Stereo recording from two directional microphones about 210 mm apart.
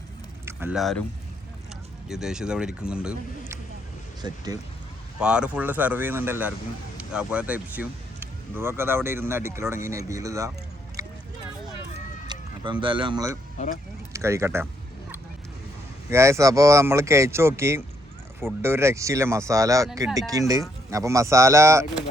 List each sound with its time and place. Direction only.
0.4 s a sound: 10° right (ahead or behind)
0.8 s speech: centre (ahead or behind)
2.0 s speech: centre (ahead or behind)
4.2 s speech: 20° right (ahead or behind)
5.2 s speech: 5° right (ahead or behind)
12.3 s speech: 20° right (ahead or behind)
16.0 s speech: 15° right (ahead or behind)